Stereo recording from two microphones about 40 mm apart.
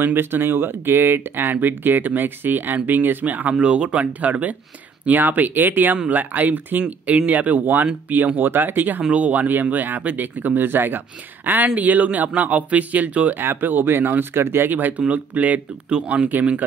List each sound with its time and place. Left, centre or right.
0.0 s speech: right
3.5 s speech: right
9.1 s speech: right
11.4 s speech: right
13.4 s speech: right
14.3 s speech: right
14.7 s speech: right
15.9 s speech: right